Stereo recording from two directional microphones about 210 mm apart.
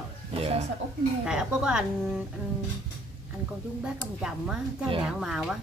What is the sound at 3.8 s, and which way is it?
Speech, 5° right (ahead or behind).